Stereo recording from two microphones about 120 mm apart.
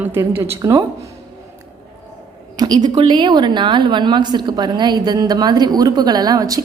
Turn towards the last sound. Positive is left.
turn(degrees=-30)  # may be behind; listen again after turning